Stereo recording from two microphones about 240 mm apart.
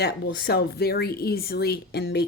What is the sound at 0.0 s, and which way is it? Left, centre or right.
A woman's voice, left.